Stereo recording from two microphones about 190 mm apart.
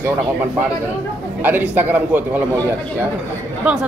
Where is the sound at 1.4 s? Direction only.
10° right (ahead or behind).